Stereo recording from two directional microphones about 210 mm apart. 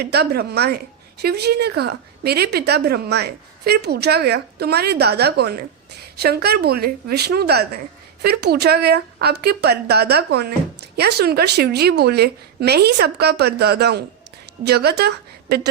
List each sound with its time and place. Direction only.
0.0 s a woman's voice: 50° right (ahead or behind)